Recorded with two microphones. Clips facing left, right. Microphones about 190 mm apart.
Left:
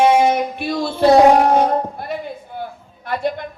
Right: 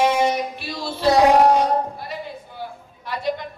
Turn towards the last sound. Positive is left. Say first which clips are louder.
# left 3 dB
turn(degrees=55)  # may be behind; listen again after turning